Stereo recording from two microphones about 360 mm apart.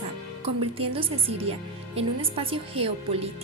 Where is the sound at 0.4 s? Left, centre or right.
Centre.